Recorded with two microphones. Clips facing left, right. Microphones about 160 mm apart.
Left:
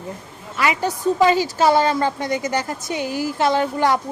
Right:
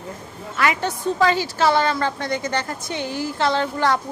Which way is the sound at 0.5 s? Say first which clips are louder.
Left 1 dB; 5° left (ahead or behind).